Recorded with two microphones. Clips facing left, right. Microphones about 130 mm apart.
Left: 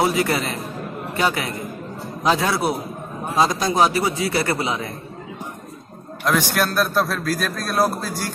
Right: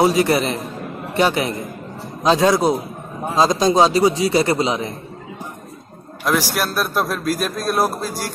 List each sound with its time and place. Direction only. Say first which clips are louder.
0.0 s a man's voice: right 4 dB; 20° right (ahead or behind)
6.2 s a man's voice: even; 5° right (ahead or behind)